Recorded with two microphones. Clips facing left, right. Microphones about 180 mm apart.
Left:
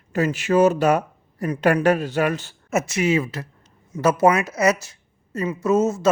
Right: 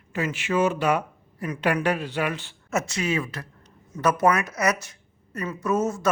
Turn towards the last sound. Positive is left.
turn(degrees=25)  # may be behind; listen again after turning